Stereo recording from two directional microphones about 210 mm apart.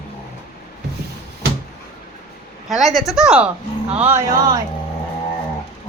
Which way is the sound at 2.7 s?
Centre (ahead or behind).